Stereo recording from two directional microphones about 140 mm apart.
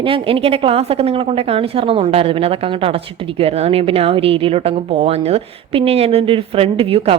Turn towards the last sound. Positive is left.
turn(degrees=-40)  # may be behind; listen again after turning